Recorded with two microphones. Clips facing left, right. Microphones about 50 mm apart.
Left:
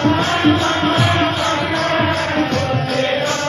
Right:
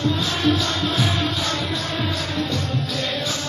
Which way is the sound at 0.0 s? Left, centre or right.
Left.